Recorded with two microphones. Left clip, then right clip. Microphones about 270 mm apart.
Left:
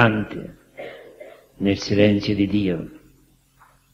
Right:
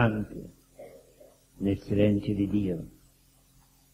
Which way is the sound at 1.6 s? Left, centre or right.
Left.